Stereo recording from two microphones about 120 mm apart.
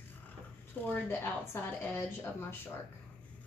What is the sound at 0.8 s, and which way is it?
A woman's voice, 20° left (ahead or behind).